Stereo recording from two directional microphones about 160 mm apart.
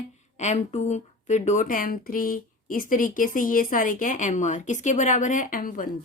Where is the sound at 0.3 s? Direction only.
45° left (ahead or behind).